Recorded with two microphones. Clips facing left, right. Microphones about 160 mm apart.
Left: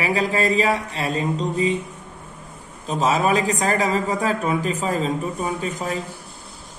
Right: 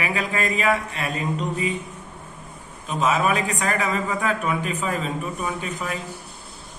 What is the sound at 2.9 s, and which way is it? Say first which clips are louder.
Speech: left 2 dB; 35° left (ahead or behind).